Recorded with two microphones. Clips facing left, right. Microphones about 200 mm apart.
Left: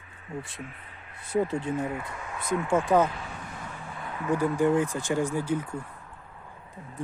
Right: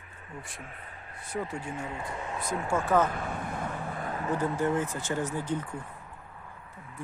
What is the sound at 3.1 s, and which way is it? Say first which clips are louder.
Vehicle: right 5 dB; 55° right (ahead or behind).